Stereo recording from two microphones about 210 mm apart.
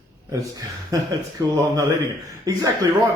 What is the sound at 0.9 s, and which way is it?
Speech, 15° right (ahead or behind).